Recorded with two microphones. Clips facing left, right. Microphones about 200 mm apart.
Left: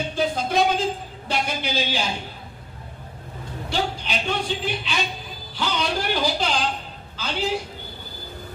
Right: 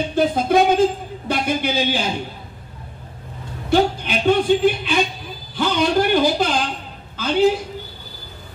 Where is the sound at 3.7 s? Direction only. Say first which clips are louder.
Right 9 dB; 50° right (ahead or behind).